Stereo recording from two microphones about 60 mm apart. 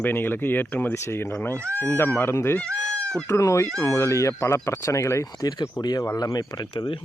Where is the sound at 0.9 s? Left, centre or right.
Left.